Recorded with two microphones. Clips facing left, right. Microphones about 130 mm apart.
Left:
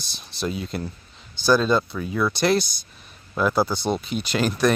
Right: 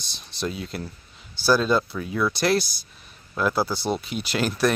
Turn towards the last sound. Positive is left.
turn(degrees=-5)  # may be behind; listen again after turning